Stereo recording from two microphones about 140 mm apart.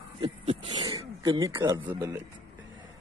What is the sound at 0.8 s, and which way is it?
Speech, 25° right (ahead or behind).